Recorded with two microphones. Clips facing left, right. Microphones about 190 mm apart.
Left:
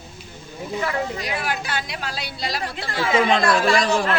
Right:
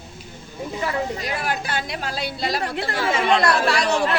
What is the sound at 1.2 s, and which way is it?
A woman's voice, 50° right (ahead or behind).